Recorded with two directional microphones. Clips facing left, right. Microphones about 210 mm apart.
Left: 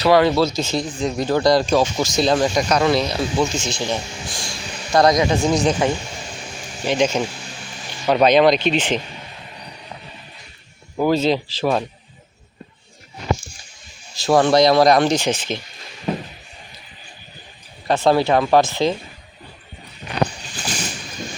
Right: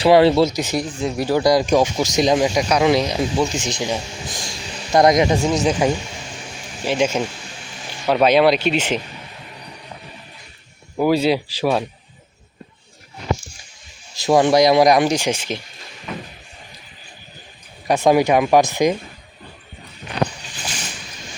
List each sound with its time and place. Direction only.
0.0 s speech: 30° right (ahead or behind)
5.5 s speech: 5° right (ahead or behind)
10.9 s speech: 10° right (ahead or behind)
14.3 s speech: 15° right (ahead or behind)
16.1 s a sound: 35° left (ahead or behind)
17.8 s speech: 15° right (ahead or behind)